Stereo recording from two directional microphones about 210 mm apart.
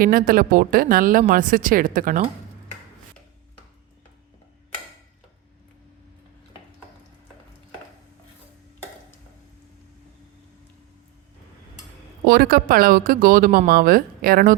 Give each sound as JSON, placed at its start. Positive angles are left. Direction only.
{"t": 0.0, "sound": "speech", "side_deg": -45}
{"t": 12.2, "sound": "speech", "side_deg": -45}